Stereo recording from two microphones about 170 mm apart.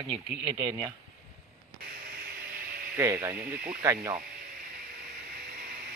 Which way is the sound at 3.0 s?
15° right (ahead or behind).